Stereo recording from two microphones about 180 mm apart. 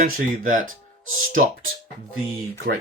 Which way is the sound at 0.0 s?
50° right (ahead or behind).